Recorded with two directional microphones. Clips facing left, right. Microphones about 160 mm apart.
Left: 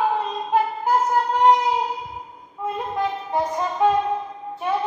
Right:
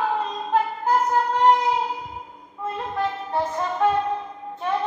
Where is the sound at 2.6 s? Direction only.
15° left (ahead or behind).